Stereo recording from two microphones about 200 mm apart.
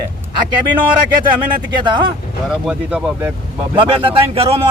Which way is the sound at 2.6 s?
5° right (ahead or behind).